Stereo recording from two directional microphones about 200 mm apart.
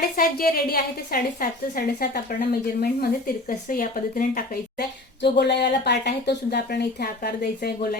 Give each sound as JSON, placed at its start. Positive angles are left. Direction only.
{"t": 0.2, "sound": "a woman's voice", "side_deg": 45}